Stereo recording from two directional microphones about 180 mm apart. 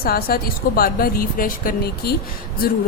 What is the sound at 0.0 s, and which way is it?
A woman's voice, 55° left (ahead or behind).